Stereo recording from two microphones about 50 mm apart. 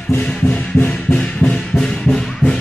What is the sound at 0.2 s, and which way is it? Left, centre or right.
Music, centre.